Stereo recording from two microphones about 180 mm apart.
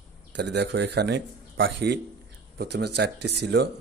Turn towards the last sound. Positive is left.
turn(degrees=-70)  # may be behind; listen again after turning